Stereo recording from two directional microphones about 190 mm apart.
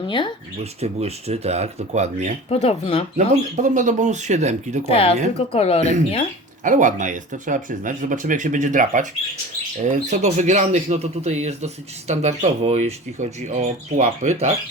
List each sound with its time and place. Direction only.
0.6 s speech: 35° right (ahead or behind)
2.5 s speech: 30° left (ahead or behind)
3.2 s speech: 40° right (ahead or behind)
4.9 s speech: 30° left (ahead or behind)
6.7 s speech: 40° right (ahead or behind)